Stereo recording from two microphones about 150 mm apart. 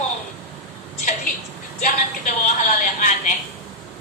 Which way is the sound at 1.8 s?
60° left (ahead or behind).